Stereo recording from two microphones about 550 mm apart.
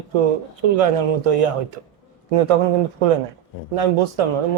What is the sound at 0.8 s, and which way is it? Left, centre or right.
Speech, right.